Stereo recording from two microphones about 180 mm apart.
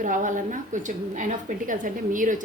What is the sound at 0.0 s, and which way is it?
A woman's voice, 45° right (ahead or behind).